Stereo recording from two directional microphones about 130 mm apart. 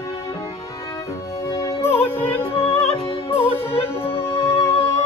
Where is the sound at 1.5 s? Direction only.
25° left (ahead or behind).